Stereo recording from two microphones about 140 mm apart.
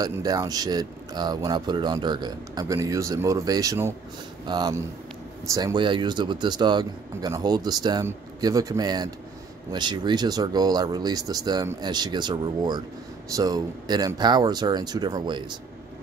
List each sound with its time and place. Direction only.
0.0 s a man's voice: 25° right (ahead or behind)